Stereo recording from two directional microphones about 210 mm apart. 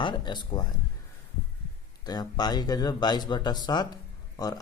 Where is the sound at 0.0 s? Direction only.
20° left (ahead or behind).